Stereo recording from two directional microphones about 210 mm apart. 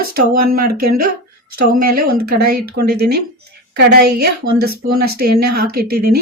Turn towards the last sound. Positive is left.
turn(degrees=-45)  # may be behind; listen again after turning